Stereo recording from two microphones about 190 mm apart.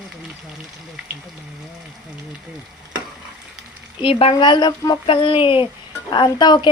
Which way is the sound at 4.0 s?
30° left (ahead or behind).